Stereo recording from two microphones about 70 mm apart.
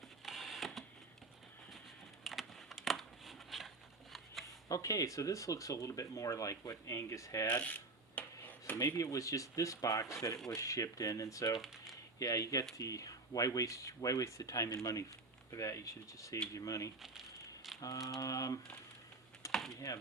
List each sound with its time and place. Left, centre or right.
0.3 s a sound: centre
2.2 s a sound: centre
4.7 s speech: left
7.6 s a sound: left
9.0 s speech: left
11.5 s typing: centre
12.2 s speech: left
17.7 s mantra: left
18.2 s speech: left
19.5 s typing: centre
19.7 s speech: left